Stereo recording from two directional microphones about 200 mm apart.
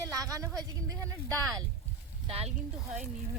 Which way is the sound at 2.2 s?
30° right (ahead or behind).